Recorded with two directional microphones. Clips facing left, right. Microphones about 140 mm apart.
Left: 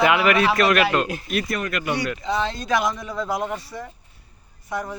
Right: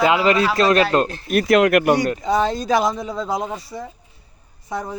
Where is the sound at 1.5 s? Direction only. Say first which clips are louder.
Right 13 dB; 85° right.